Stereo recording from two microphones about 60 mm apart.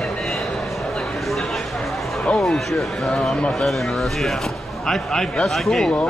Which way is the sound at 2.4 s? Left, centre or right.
Centre.